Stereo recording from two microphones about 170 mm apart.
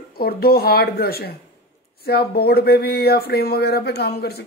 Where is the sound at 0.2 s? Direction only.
65° left (ahead or behind).